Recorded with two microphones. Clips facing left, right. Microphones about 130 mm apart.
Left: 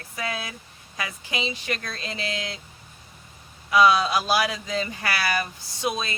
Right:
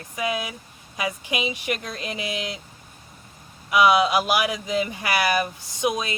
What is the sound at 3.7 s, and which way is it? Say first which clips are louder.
Speech: right 1 dB; 15° right (ahead or behind).